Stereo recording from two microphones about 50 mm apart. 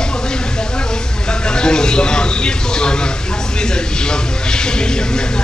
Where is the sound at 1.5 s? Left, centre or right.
Centre.